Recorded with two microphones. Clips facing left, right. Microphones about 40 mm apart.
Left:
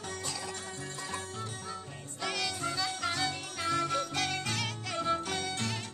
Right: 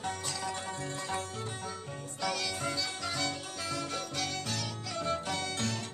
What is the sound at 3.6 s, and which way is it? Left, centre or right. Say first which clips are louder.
Jingle bell: left 7 dB; left.